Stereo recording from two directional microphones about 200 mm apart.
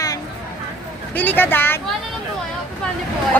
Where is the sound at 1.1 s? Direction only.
10° left (ahead or behind).